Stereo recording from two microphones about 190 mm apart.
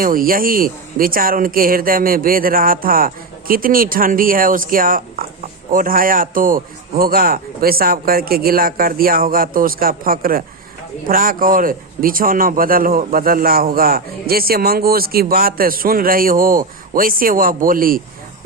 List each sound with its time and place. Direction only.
0.0 s speech: 50° right (ahead or behind)